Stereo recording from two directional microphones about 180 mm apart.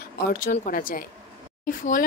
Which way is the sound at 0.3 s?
50° left (ahead or behind).